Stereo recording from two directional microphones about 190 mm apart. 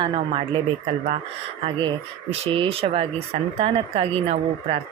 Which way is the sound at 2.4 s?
30° right (ahead or behind).